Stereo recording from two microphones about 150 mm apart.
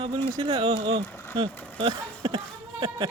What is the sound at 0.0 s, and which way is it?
Speech, 35° right (ahead or behind).